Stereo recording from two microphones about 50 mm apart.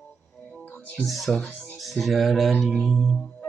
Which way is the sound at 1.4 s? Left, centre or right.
Left.